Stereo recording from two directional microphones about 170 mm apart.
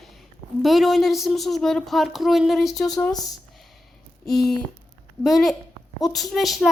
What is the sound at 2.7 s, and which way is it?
Speech, 20° left (ahead or behind).